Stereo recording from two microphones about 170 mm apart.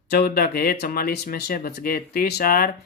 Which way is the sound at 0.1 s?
65° left (ahead or behind).